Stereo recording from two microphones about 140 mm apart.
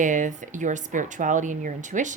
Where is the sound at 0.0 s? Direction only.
65° right (ahead or behind).